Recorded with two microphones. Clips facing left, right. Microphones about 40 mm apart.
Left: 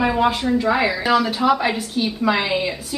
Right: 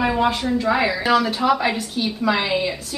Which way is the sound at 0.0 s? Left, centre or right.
Centre.